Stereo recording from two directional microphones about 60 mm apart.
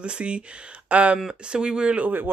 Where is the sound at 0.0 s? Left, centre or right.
Centre.